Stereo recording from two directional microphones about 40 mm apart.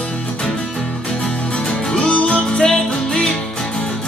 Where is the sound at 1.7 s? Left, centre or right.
Left.